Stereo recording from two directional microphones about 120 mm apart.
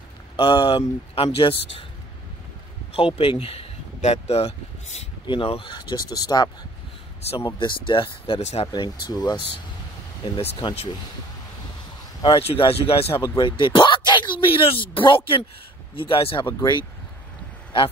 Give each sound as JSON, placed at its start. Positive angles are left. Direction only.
{"t": 0.4, "sound": "speech", "side_deg": 45}
{"t": 2.9, "sound": "speech", "side_deg": 50}
{"t": 5.2, "sound": "speech", "side_deg": 45}
{"t": 8.4, "sound": "speech", "side_deg": 70}
{"t": 8.7, "sound": "speech", "side_deg": 40}
{"t": 10.6, "sound": "speech", "side_deg": 50}
{"t": 12.2, "sound": "speech", "side_deg": 50}
{"t": 17.7, "sound": "speech", "side_deg": 45}